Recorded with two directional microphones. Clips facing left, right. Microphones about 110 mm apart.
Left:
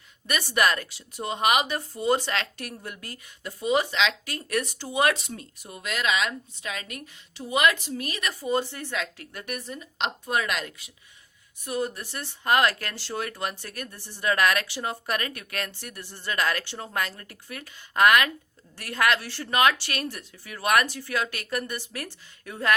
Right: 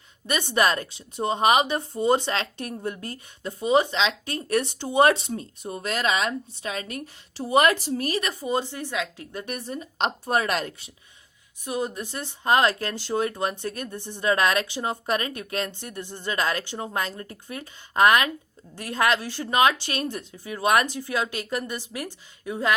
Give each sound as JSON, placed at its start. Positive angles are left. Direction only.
{"t": 0.3, "sound": "speech", "side_deg": -25}
{"t": 8.3, "sound": "speech", "side_deg": -20}
{"t": 11.6, "sound": "a woman's voice", "side_deg": -15}